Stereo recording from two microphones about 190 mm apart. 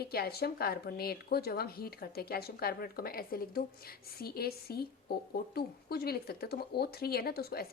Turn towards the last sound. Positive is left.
turn(degrees=55)  # may be behind; listen again after turning